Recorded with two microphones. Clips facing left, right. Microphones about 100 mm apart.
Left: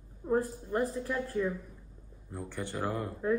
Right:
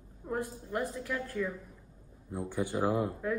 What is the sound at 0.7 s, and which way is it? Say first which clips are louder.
Speech: left 3 dB; 35° left (ahead or behind).